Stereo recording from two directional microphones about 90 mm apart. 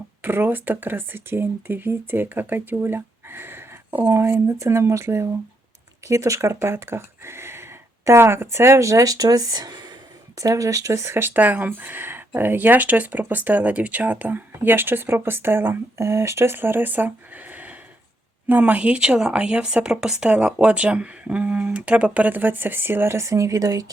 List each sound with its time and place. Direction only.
0.2 s speech: 20° right (ahead or behind); by 23.8 s 40° right (ahead or behind)